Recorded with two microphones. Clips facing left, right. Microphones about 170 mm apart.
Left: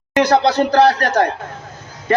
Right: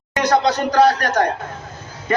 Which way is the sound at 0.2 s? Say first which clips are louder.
Left 3 dB; 30° left (ahead or behind).